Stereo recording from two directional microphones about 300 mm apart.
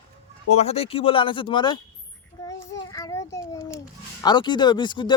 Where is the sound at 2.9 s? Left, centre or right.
Centre.